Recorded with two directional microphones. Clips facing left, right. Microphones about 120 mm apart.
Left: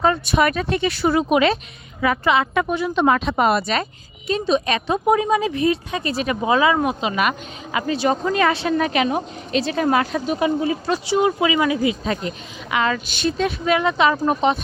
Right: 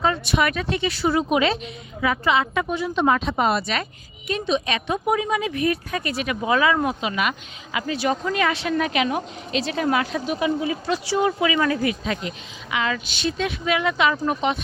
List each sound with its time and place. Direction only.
0.0 s a woman's voice: 40° left (ahead or behind); by 3.6 s 60° left (ahead or behind)
4.3 s a woman's voice: 35° left (ahead or behind)
7.2 s a woman's voice: 45° left (ahead or behind)
11.0 s speech: 20° left (ahead or behind)
12.0 s a woman's voice: 35° left (ahead or behind)